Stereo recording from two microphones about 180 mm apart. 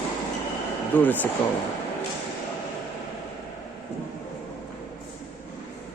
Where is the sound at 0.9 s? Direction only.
10° left (ahead or behind).